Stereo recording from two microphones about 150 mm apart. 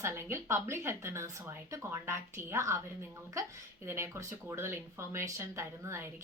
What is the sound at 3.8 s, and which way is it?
A woman's voice, 20° right (ahead or behind).